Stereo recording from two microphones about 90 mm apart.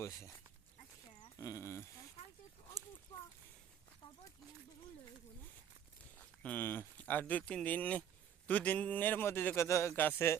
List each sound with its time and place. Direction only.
0.0 s speech: 35° left (ahead or behind)
1.4 s speech: 35° left (ahead or behind)
6.1 s a man's voice: 15° left (ahead or behind); by 9.9 s 35° left (ahead or behind)
9.9 s a man's voice: 20° left (ahead or behind)